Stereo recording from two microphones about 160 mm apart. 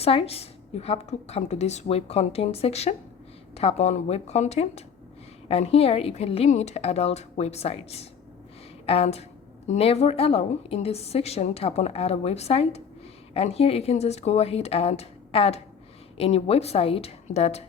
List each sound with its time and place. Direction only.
0.0 s a woman's voice: 35° left (ahead or behind)